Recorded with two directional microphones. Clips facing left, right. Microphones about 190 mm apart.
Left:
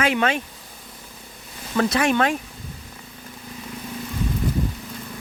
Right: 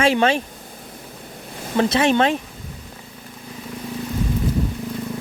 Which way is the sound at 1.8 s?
25° right (ahead or behind).